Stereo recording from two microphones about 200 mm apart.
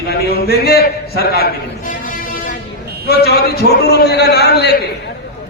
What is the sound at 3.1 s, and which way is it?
A man's voice, 55° left (ahead or behind).